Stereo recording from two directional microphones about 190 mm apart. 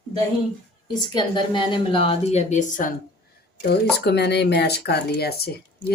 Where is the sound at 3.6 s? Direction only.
60° left (ahead or behind).